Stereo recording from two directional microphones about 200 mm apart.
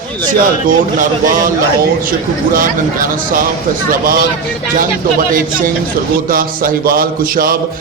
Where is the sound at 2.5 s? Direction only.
45° right (ahead or behind).